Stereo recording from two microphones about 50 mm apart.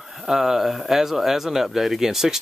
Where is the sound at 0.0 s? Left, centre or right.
Centre.